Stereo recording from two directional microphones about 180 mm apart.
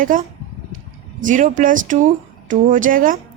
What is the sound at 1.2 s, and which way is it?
Speech, 45° right (ahead or behind).